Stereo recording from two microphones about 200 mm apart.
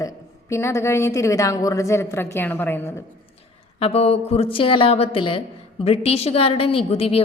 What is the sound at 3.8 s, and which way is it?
A woman's voice, 30° left (ahead or behind).